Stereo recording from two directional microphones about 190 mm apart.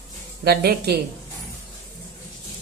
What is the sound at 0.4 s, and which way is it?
Speech, 55° right (ahead or behind).